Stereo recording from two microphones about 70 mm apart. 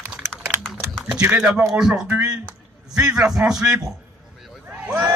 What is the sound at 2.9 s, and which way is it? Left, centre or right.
Speech, centre.